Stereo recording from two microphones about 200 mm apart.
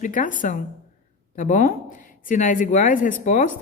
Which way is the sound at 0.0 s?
40° left (ahead or behind).